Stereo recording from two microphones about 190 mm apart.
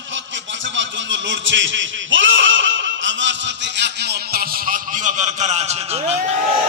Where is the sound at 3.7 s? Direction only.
60° right (ahead or behind); by 5.8 s 35° right (ahead or behind).